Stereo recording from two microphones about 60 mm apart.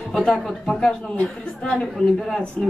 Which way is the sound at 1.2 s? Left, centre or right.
Left.